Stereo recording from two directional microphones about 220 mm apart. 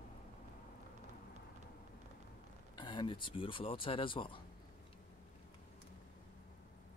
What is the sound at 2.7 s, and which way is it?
Speech, 20° left (ahead or behind).